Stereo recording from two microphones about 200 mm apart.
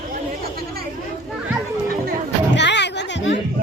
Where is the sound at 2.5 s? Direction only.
60° left (ahead or behind).